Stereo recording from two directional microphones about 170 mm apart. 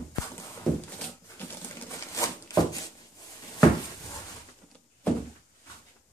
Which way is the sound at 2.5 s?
20° left (ahead or behind).